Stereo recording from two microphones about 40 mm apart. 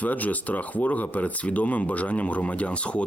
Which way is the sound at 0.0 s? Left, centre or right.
Left.